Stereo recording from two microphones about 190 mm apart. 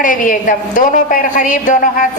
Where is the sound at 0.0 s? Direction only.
45° left (ahead or behind).